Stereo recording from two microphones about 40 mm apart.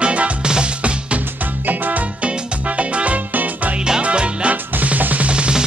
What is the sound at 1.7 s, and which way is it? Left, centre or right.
Music, right.